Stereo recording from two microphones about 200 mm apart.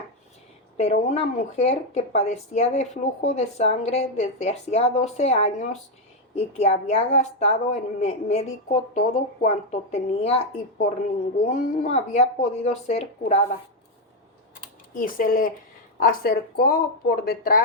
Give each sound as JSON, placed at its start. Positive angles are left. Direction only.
{"t": 0.8, "sound": "speech", "side_deg": 30}
{"t": 14.9, "sound": "speech", "side_deg": 45}